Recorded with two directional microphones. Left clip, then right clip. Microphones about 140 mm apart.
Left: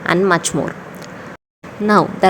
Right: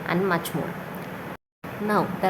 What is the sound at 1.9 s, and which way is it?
Speech, 50° left (ahead or behind).